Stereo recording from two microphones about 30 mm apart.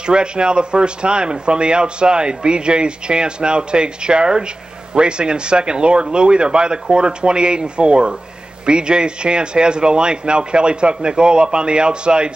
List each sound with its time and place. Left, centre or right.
0.0 s speech: right